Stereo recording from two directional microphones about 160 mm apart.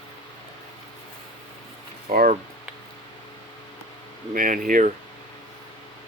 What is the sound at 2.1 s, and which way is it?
Speech, 60° right (ahead or behind).